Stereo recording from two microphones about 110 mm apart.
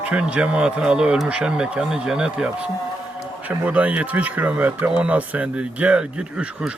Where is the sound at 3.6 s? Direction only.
10° right (ahead or behind).